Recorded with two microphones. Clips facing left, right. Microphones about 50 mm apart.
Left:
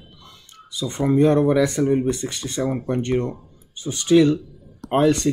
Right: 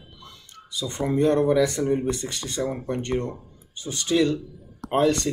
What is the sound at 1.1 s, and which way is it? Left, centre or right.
Speech, left.